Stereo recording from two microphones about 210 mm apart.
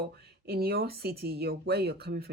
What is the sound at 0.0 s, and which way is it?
Speech, 50° right (ahead or behind).